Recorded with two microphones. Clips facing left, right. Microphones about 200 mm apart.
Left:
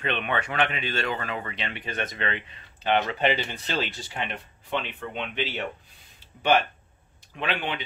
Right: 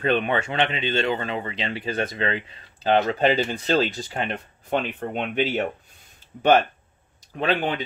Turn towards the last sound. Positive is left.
turn(degrees=-40)  # may be behind; listen again after turning